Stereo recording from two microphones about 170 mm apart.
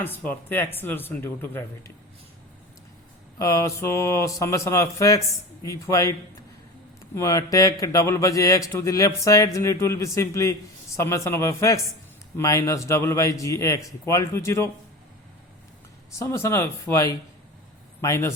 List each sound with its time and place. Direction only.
0.0 s a man's voice: 10° left (ahead or behind)
3.3 s a man's voice: 20° left (ahead or behind)
7.2 s a man's voice: 20° left (ahead or behind)
16.1 s a man's voice: 15° left (ahead or behind)